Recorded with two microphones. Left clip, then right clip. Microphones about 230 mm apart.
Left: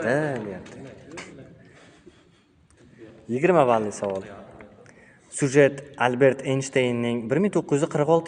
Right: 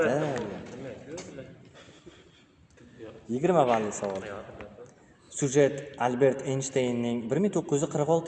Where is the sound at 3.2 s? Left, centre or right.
Left.